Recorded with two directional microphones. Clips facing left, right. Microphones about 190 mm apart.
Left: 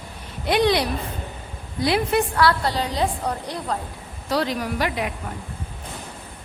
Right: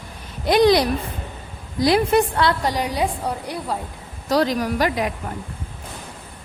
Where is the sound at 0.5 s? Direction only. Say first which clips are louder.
Right 4 dB; 40° right (ahead or behind).